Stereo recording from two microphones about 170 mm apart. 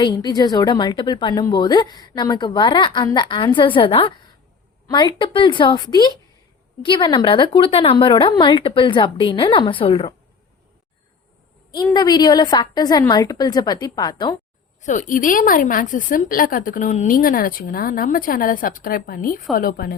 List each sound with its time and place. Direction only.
0.0 s a woman's voice: 25° left (ahead or behind)
11.7 s a woman's voice: 25° left (ahead or behind)
14.8 s a woman's voice: 50° left (ahead or behind)